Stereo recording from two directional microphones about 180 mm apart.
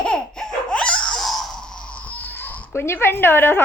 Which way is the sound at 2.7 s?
15° left (ahead or behind).